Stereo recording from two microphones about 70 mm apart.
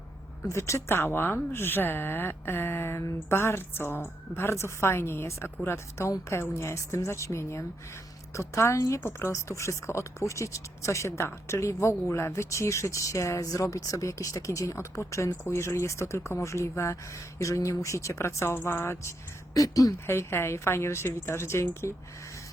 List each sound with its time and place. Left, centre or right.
0.9 s speech: left
19.5 s speech: left
20.1 s speech: left